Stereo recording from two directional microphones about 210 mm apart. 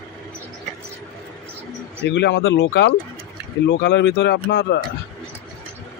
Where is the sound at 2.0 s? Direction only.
55° left (ahead or behind).